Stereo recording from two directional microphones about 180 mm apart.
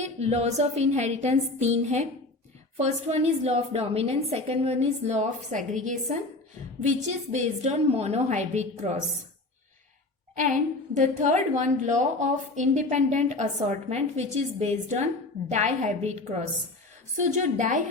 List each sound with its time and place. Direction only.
0.0 s a woman's voice: 35° right (ahead or behind)
10.3 s a woman's voice: 45° right (ahead or behind)